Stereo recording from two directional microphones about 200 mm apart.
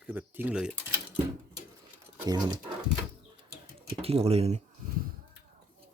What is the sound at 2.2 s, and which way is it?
Speech, 20° right (ahead or behind).